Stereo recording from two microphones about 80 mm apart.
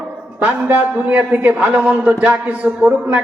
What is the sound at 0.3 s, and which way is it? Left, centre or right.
A man's voice, right.